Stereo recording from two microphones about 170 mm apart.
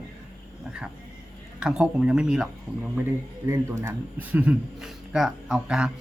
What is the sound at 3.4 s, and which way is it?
A man's voice, 15° right (ahead or behind).